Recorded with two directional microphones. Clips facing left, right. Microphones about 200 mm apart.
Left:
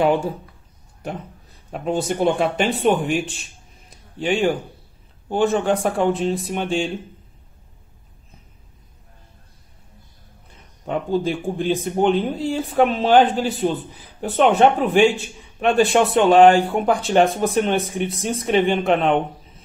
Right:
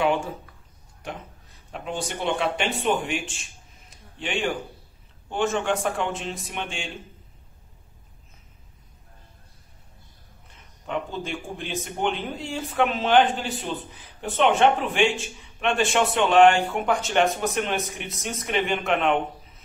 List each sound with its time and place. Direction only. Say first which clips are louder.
0.0 s speech: left 5 dB; 35° left (ahead or behind)
2.0 s speech: left 6 dB; 40° left (ahead or behind)
10.9 s speech: left 8 dB; 35° left (ahead or behind)